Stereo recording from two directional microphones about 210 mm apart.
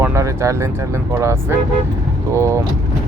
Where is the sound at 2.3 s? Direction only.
15° right (ahead or behind).